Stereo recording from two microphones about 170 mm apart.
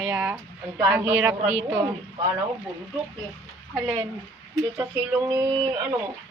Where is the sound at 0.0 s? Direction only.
10° right (ahead or behind).